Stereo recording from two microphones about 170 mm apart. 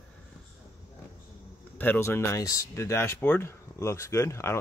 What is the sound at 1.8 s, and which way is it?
Speech, 10° left (ahead or behind).